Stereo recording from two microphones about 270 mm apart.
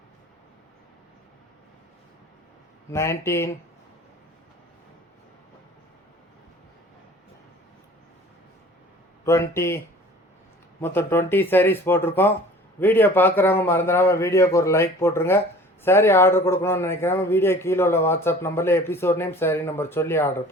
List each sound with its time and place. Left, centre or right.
2.9 s a man's voice: centre
9.2 s a man's voice: centre